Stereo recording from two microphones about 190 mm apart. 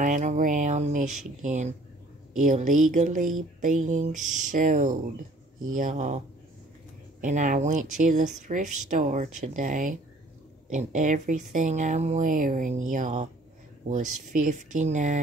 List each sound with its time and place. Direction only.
0.0 s speech: 40° right (ahead or behind)